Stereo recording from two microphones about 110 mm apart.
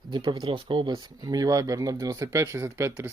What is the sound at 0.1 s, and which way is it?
Speech, 45° right (ahead or behind).